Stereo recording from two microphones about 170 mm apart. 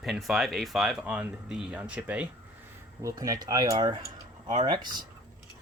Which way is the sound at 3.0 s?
20° right (ahead or behind).